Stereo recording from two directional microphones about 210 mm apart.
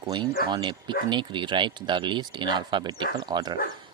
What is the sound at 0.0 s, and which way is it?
Speech, 20° right (ahead or behind).